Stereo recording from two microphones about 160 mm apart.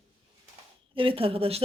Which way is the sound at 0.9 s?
35° right (ahead or behind).